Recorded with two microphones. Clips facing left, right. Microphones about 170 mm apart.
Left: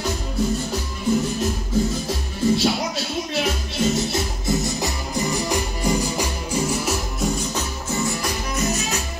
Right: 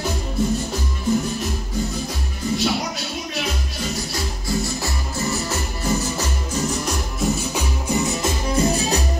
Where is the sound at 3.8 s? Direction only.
25° left (ahead or behind); by 7.3 s 5° left (ahead or behind).